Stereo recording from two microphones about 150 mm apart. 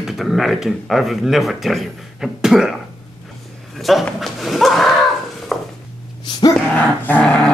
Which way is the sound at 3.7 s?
Centre (ahead or behind).